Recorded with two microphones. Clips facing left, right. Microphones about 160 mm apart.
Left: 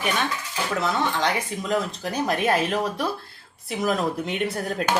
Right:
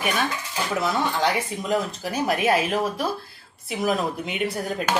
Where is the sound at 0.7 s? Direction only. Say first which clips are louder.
Even; 5° right (ahead or behind).